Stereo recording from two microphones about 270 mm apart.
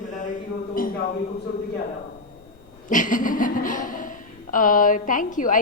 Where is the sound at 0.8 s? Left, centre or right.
Left.